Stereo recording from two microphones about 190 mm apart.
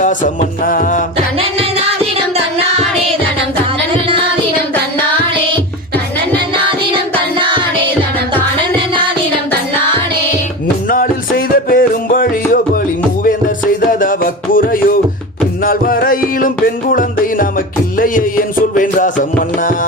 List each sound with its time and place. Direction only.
0.6 s mantra: 45° left (ahead or behind)
1.4 s music: 30° right (ahead or behind)
6.7 s music: 25° right (ahead or behind)
10.8 s music: 50° left (ahead or behind)
14.0 s music: 45° left (ahead or behind)
18.8 s music: 45° left (ahead or behind)